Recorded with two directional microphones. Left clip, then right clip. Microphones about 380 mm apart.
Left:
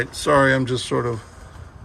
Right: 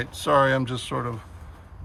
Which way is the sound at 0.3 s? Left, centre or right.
Centre.